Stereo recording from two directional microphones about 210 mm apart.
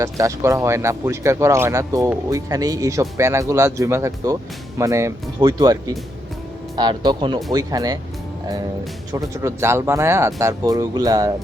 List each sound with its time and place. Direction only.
0.0 s speech: 15° right (ahead or behind)
9.1 s speech: 15° right (ahead or behind)